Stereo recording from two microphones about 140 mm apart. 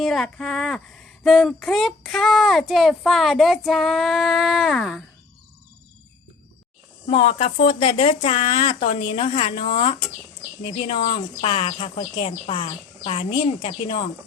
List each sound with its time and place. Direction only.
0.0 s speech: centre (ahead or behind)
7.1 s speech: 45° left (ahead or behind)